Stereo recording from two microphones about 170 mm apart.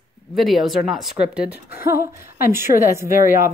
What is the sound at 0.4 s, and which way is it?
Speech, centre (ahead or behind).